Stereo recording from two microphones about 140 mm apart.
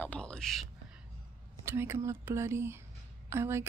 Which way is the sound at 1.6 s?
20° right (ahead or behind).